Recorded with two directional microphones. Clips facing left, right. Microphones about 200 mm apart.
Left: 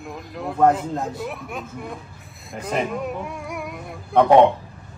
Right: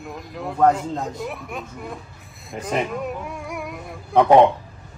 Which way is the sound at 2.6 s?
Centre (ahead or behind).